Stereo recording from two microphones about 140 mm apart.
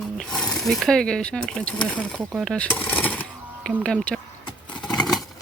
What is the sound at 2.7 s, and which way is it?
Coin, 15° left (ahead or behind).